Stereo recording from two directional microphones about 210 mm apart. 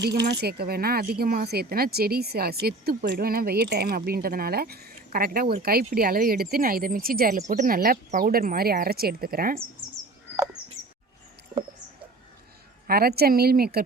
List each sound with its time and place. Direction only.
0.3 s speech: 50° right (ahead or behind)
12.9 s speech: 45° right (ahead or behind)